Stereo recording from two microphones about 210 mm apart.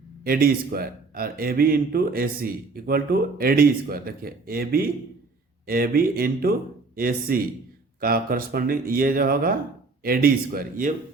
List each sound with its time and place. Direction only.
0.3 s speech: 45° right (ahead or behind)